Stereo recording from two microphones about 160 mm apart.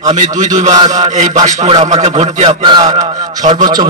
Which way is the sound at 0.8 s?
25° right (ahead or behind).